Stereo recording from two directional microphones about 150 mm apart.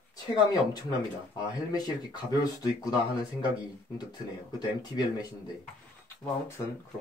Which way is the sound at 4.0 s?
25° left (ahead or behind).